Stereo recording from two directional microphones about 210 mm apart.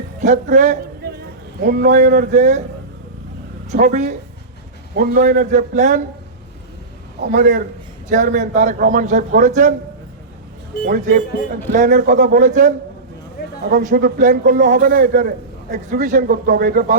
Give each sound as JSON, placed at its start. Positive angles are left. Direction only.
{"t": 0.3, "sound": "a man's voice", "side_deg": -35}
{"t": 3.7, "sound": "a man's voice", "side_deg": -35}
{"t": 7.2, "sound": "a man's voice", "side_deg": -40}
{"t": 10.8, "sound": "a man's voice", "side_deg": -45}